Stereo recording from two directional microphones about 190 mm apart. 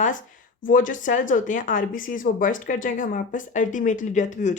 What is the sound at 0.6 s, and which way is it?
Speech, 45° left (ahead or behind).